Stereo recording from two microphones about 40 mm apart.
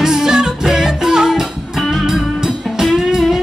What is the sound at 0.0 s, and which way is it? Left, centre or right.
Music, centre.